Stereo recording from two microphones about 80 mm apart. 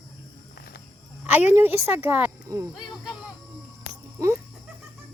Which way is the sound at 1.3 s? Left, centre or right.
Right.